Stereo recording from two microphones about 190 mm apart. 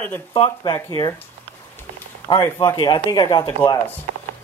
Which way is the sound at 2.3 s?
20° left (ahead or behind).